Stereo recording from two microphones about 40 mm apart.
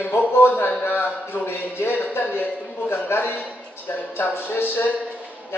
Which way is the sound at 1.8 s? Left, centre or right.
Left.